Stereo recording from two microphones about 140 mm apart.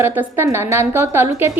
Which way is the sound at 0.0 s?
15° right (ahead or behind).